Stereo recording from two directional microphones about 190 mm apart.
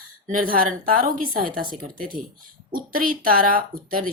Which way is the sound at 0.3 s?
50° right (ahead or behind).